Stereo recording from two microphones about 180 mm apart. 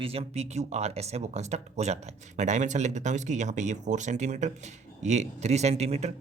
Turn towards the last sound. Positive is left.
turn(degrees=-35)  # may be behind; listen again after turning